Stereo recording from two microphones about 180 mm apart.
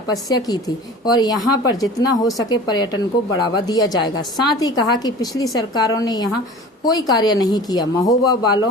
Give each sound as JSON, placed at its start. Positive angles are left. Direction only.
{"t": 0.1, "sound": "speech", "side_deg": 20}